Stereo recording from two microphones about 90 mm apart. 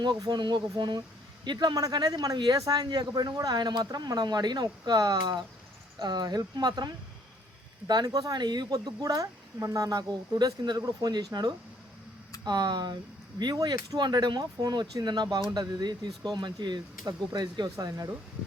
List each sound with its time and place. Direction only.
0.0 s speech: 55° right (ahead or behind)